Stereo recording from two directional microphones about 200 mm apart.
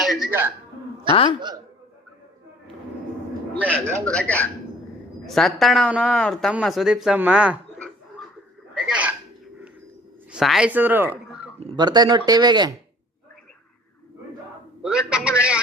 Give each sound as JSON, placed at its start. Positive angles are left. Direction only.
{"t": 0.0, "sound": "music", "side_deg": 0}
{"t": 1.1, "sound": "a woman's voice", "side_deg": 25}
{"t": 4.0, "sound": "speech", "side_deg": 5}
{"t": 8.7, "sound": "hiccup", "side_deg": -5}
{"t": 10.3, "sound": "speech", "side_deg": 0}
{"t": 11.6, "sound": "speech", "side_deg": -25}
{"t": 14.8, "sound": "speech", "side_deg": -5}